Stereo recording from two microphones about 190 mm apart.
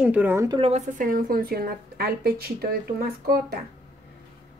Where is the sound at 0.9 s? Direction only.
50° right (ahead or behind).